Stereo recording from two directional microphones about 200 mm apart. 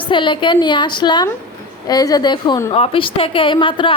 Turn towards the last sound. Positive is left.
turn(degrees=25)  # may be behind; listen again after turning